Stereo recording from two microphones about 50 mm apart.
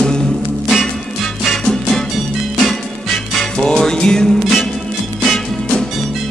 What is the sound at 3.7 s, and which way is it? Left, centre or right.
Music, centre.